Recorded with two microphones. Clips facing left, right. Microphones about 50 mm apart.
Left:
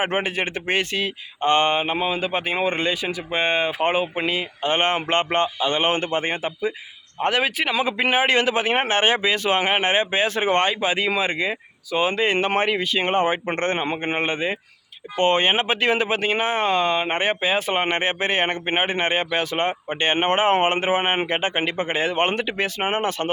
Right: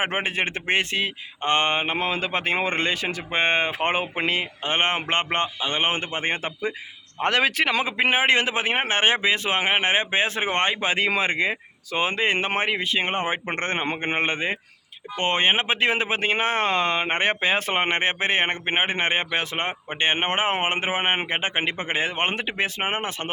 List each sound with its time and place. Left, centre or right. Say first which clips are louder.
0.0 s speech: left 2 dB; right
2.0 s speech: left 2 dB; right
4.6 s speech: left 4 dB; right
6.4 s speech: left 3 dB; right
7.2 s a man's voice: even; right
7.9 s speech: left 2 dB; right
10.8 s speech: left 1 dB; right
13.7 s speech: left 1 dB; right
15.2 s speech: left 3 dB; right